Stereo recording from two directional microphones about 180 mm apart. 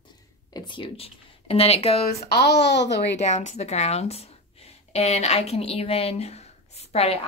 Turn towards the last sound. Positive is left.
turn(degrees=35)  # may be behind; listen again after turning